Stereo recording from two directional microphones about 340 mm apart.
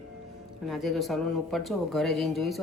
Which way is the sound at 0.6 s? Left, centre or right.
Centre.